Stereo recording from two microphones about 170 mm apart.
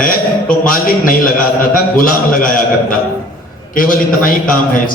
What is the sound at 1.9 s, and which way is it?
A man's voice, 55° left (ahead or behind).